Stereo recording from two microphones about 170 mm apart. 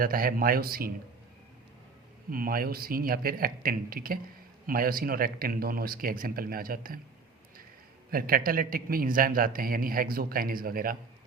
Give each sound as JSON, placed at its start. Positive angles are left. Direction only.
{"t": 0.0, "sound": "a man's voice", "side_deg": -60}
{"t": 2.3, "sound": "a man's voice", "side_deg": -60}
{"t": 8.1, "sound": "a man's voice", "side_deg": -55}